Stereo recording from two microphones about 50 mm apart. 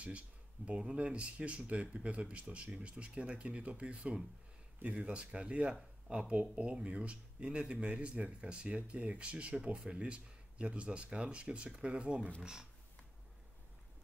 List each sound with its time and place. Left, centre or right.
0.7 s speech: right